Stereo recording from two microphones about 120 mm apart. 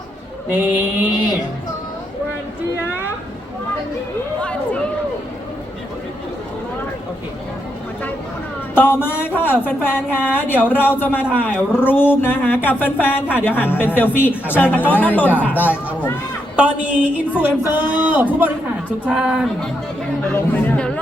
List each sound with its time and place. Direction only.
0.5 s speech: 15° right (ahead or behind)
4.4 s a sound: 10° left (ahead or behind)
8.7 s speech: 15° left (ahead or behind)
16.6 s speech: 10° right (ahead or behind)
20.3 s chatter: 15° left (ahead or behind)